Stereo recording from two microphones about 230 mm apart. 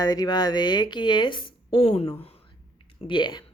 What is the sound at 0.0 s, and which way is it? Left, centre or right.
A woman's voice, centre.